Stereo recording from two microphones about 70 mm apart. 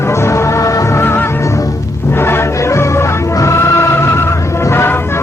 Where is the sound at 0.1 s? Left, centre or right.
Left.